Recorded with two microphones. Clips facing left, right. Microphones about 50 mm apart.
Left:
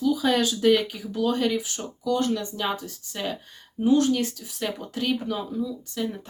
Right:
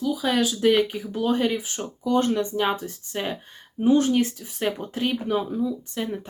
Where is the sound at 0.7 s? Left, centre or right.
Right.